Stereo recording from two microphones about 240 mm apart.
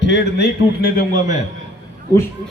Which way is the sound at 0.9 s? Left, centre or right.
Left.